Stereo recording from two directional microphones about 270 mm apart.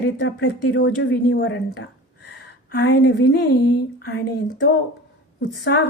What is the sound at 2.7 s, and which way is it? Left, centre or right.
Speech, left.